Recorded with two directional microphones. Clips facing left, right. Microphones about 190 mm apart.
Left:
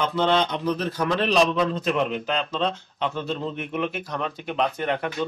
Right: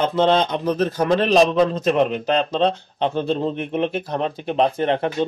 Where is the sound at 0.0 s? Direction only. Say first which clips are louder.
Right 4 dB; 40° right (ahead or behind).